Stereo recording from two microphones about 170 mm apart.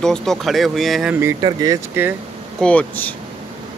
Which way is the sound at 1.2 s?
20° right (ahead or behind).